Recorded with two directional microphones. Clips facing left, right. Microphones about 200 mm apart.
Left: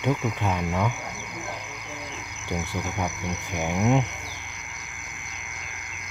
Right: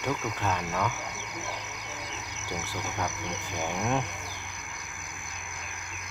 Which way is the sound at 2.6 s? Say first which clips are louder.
Left 4 dB; 10° left (ahead or behind).